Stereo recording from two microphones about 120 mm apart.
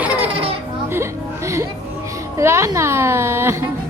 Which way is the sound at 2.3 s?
25° right (ahead or behind).